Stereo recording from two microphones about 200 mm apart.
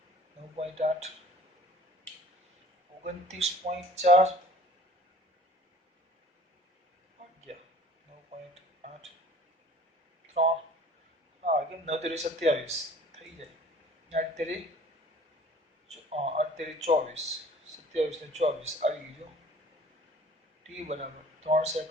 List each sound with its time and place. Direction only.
0.5 s speech: 35° right (ahead or behind)
3.0 s speech: 35° right (ahead or behind)
11.4 s speech: 35° right (ahead or behind)
14.1 s speech: 35° right (ahead or behind)
15.9 s speech: 30° right (ahead or behind)
20.7 s speech: 35° right (ahead or behind)